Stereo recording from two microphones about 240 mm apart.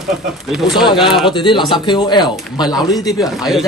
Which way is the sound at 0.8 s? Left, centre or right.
Centre.